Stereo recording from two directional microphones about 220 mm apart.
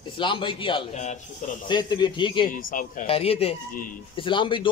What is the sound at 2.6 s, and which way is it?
Speech, 40° left (ahead or behind).